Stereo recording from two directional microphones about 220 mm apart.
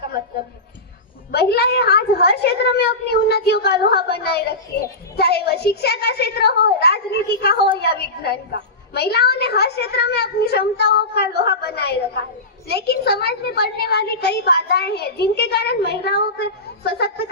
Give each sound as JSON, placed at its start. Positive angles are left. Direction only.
{"t": 1.3, "sound": "a woman's voice", "side_deg": 45}